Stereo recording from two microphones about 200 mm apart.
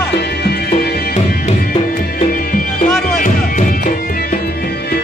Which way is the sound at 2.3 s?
45° left (ahead or behind).